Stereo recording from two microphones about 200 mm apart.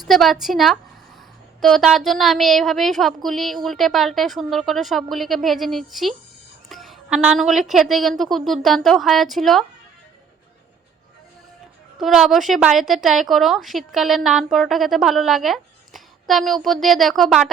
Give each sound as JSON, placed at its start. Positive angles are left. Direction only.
{"t": 0.0, "sound": "a woman's voice", "side_deg": 0}
{"t": 11.9, "sound": "a woman's voice", "side_deg": 0}